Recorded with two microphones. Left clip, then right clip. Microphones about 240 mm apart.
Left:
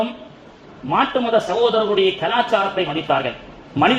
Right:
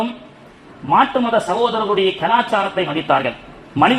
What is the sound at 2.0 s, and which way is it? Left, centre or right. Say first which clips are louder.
A man's voice: right 2 dB; right.